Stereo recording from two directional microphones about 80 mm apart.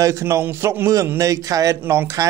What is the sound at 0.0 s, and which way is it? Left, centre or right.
A man's voice, right.